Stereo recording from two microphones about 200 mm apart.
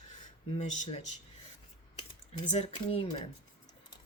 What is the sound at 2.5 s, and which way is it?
Speech, 30° left (ahead or behind).